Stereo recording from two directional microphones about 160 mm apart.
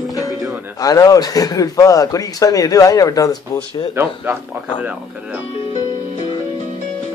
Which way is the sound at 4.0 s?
15° right (ahead or behind).